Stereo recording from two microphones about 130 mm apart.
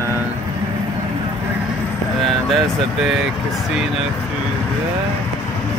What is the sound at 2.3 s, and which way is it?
Speech, centre (ahead or behind).